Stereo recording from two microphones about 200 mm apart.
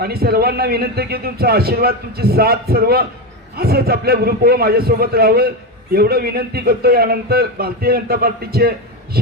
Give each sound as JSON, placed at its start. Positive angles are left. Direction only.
{"t": 0.0, "sound": "a man's voice", "side_deg": -50}